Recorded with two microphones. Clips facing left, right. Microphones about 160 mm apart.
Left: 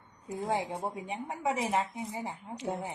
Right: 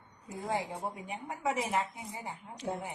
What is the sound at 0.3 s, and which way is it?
Speech, 25° left (ahead or behind).